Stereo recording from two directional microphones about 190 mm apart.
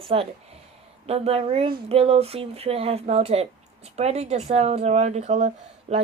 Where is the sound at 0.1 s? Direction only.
30° right (ahead or behind).